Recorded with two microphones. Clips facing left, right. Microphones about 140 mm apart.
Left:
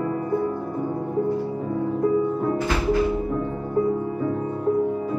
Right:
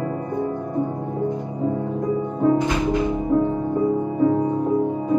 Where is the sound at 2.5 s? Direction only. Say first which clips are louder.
Right 2 dB; 20° right (ahead or behind).